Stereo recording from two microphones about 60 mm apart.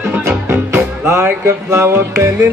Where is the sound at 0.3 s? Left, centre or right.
Right.